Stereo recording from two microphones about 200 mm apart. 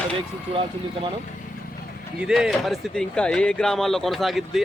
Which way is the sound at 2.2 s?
Centre (ahead or behind).